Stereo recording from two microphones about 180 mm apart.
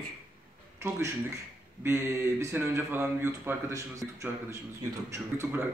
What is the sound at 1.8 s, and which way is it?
Speech, 15° right (ahead or behind).